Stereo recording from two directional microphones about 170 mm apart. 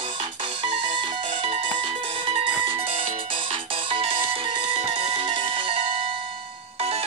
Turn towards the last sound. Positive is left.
turn(degrees=-30)  # may be behind; listen again after turning